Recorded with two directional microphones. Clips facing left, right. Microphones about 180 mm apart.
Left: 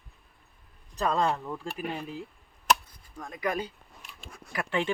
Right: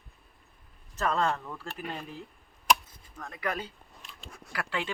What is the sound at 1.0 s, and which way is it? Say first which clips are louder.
Speech: left 2 dB; 15° left (ahead or behind).